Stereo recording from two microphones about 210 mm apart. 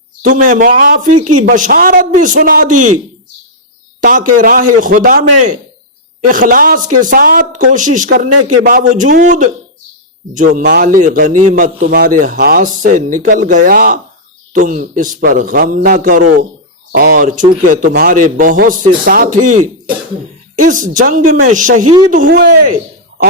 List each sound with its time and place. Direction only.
0.2 s a man's voice: 35° right (ahead or behind)
4.0 s a man's voice: 40° right (ahead or behind)